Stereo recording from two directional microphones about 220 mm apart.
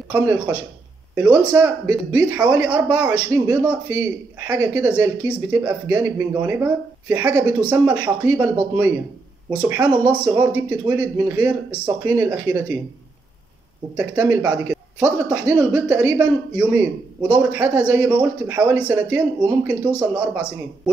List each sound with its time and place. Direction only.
0.1 s speech: 10° right (ahead or behind)
13.9 s speech: 5° right (ahead or behind)